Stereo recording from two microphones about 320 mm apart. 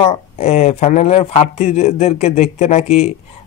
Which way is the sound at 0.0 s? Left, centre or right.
Centre.